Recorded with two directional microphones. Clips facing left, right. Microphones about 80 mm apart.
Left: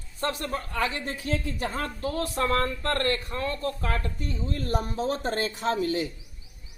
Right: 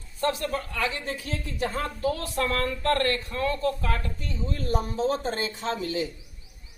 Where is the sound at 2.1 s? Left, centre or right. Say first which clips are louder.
Left 2 dB; left.